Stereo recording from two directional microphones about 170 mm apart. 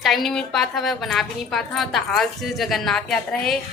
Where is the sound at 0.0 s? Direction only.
Centre (ahead or behind).